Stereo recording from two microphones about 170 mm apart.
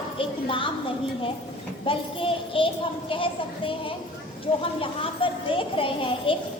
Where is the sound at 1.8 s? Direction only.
30° left (ahead or behind).